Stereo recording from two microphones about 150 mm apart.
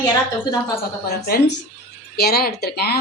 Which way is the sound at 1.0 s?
90° left.